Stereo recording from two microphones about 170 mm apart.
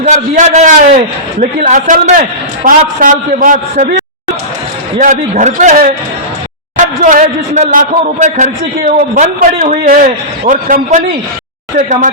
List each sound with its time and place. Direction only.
0.0 s a man's voice: 45° right (ahead or behind)
4.9 s a man's voice: 45° right (ahead or behind)
9.8 s a man's voice: 55° right (ahead or behind)